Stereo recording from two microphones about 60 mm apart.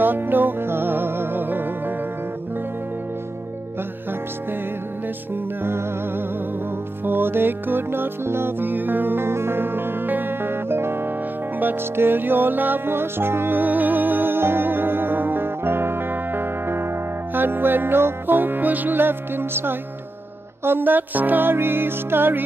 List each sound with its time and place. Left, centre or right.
0.0 s music: right
5.3 s music: right